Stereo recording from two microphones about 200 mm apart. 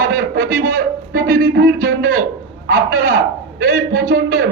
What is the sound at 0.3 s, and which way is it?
Speech, 45° right (ahead or behind).